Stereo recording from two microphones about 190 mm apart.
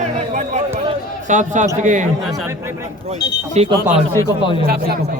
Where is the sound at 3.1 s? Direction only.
35° right (ahead or behind).